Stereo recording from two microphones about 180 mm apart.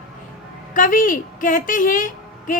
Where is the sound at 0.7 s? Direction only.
50° left (ahead or behind).